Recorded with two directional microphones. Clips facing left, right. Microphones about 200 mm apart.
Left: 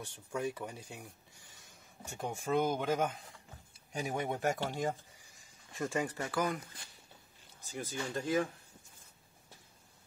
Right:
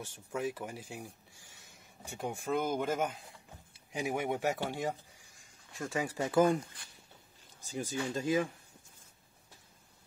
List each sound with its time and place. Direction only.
0.3 s speech: 5° right (ahead or behind)
2.0 s speech: centre (ahead or behind)
5.4 s a sound: centre (ahead or behind)
6.1 s speech: 20° right (ahead or behind)
7.7 s speech: 10° right (ahead or behind)